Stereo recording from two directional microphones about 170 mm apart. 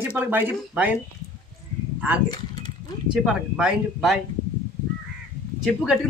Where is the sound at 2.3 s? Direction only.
25° left (ahead or behind).